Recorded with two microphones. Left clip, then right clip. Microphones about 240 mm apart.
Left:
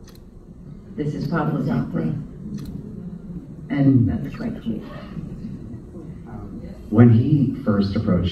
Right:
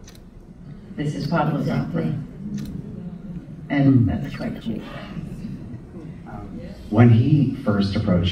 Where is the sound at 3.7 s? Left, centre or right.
Centre.